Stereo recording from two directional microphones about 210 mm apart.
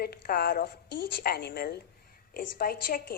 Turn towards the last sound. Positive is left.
turn(degrees=40)  # may be behind; listen again after turning